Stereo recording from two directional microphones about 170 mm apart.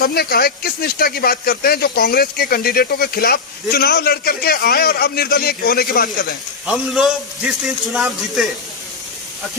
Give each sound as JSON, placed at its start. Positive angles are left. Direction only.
{"t": 0.0, "sound": "speech", "side_deg": 65}
{"t": 6.7, "sound": "a man's voice", "side_deg": 0}